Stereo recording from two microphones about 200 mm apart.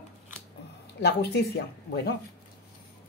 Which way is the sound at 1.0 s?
55° left (ahead or behind).